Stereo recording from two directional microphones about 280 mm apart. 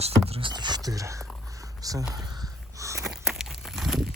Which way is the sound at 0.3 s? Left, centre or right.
Centre.